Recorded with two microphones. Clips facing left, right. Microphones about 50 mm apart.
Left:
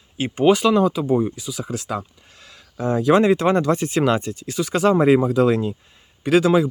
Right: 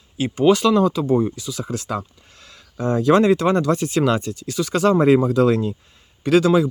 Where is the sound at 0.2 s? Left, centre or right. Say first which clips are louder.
Even; left.